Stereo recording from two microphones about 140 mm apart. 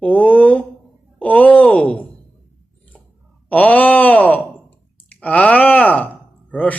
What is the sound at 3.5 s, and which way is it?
Groan, 10° left (ahead or behind).